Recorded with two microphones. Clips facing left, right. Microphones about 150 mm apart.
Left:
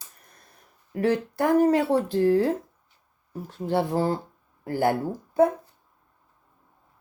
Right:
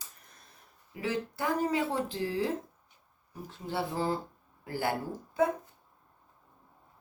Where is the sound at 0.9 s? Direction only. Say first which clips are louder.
Left 9 dB; 60° left (ahead or behind).